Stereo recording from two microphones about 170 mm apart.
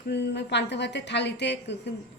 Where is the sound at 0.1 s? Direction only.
90° left.